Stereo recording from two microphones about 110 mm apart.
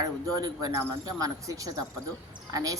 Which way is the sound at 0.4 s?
35° right (ahead or behind).